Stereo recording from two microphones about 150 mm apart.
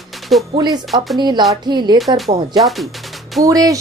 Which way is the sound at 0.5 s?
25° right (ahead or behind).